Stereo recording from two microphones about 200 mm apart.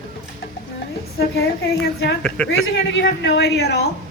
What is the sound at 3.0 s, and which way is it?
Speech, 60° left (ahead or behind).